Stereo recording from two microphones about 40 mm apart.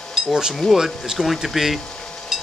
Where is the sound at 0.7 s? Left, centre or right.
Centre.